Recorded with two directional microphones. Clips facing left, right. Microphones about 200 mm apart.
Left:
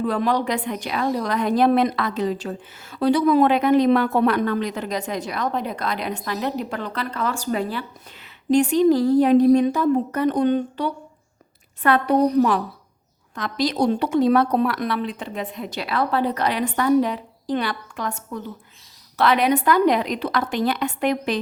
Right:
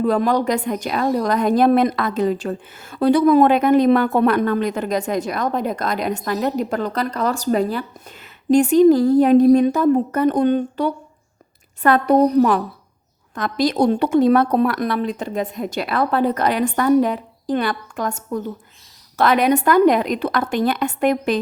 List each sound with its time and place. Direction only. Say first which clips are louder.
0.0 s a woman's voice: right 4 dB; 45° right (ahead or behind)